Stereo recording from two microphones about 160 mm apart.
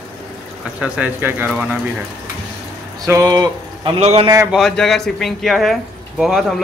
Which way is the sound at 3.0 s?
20° right (ahead or behind).